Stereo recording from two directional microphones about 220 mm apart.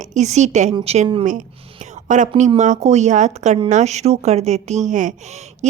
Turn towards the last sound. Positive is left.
turn(degrees=-35)  # may be behind; listen again after turning